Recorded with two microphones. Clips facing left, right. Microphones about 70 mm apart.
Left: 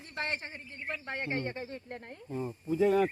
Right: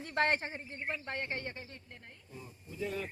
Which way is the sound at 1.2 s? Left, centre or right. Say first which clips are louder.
Left 5 dB; centre.